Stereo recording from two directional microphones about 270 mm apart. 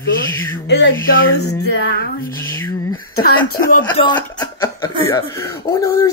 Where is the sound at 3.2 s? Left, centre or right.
Left.